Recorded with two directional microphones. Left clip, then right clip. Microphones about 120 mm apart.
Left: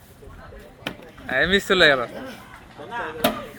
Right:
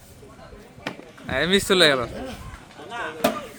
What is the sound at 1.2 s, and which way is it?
Speech, 35° right (ahead or behind).